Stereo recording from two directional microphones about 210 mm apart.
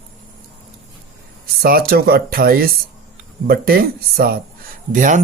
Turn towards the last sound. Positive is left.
turn(degrees=-40)  # may be behind; listen again after turning